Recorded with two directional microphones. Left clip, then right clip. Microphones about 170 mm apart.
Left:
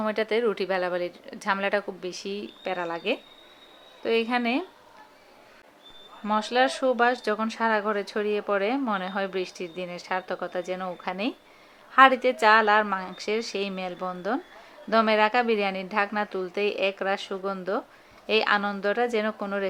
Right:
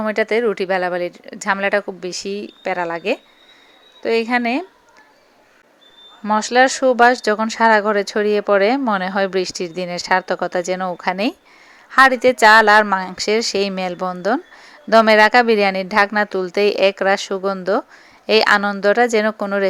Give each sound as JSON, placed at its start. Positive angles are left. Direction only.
{"t": 0.0, "sound": "a woman's voice", "side_deg": -35}
{"t": 6.2, "sound": "speech", "side_deg": -40}